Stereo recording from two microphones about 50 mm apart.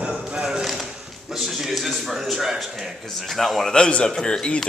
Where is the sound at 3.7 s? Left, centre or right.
Centre.